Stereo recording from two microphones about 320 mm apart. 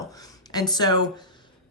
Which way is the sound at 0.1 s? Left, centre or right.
Centre.